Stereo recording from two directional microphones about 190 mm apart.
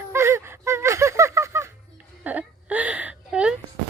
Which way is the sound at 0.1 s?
15° right (ahead or behind).